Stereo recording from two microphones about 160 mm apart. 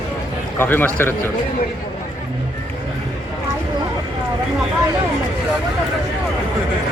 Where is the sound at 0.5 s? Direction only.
15° left (ahead or behind).